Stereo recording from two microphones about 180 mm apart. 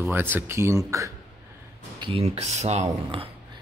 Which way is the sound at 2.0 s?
30° right (ahead or behind).